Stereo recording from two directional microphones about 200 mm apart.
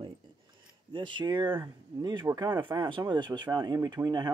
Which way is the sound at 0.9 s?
25° right (ahead or behind).